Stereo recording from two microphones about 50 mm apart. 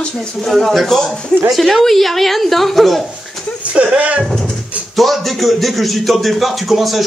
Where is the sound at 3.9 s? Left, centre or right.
Right.